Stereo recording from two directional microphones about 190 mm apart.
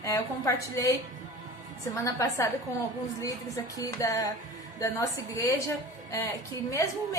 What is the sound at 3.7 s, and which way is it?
A woman's voice, 15° left (ahead or behind).